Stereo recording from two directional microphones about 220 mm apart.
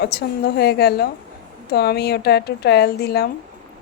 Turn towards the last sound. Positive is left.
turn(degrees=45)  # may be behind; listen again after turning